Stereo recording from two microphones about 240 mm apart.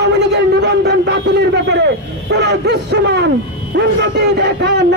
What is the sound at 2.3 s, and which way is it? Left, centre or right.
A man's voice, right.